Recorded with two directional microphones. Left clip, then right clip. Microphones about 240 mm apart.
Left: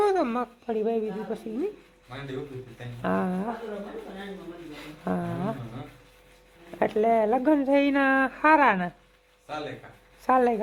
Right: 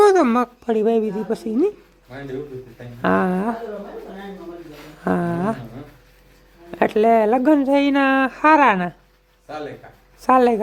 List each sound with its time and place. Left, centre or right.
0.0 s speech: centre
3.0 s speech: centre
5.0 s speech: centre
6.7 s speech: centre
10.2 s speech: centre